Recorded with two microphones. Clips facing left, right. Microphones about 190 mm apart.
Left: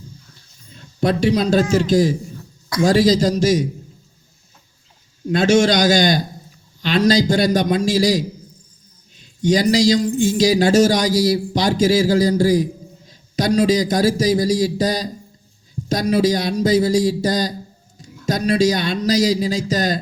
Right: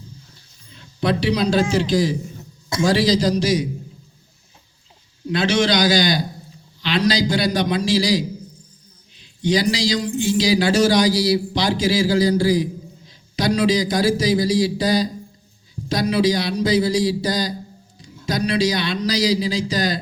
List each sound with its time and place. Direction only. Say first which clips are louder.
0.7 s a sound: left 2 dB; 45° left (ahead or behind)
1.7 s a man's voice: left 3 dB; 45° left (ahead or behind)
5.3 s a man's voice: left 4 dB; 45° left (ahead or behind)